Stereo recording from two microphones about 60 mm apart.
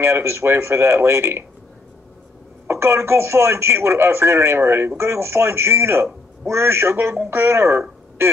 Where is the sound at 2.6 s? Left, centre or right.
Right.